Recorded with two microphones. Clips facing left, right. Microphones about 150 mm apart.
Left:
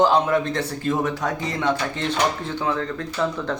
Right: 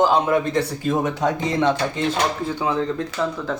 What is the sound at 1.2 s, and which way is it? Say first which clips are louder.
Speech: right 5 dB; 20° right (ahead or behind).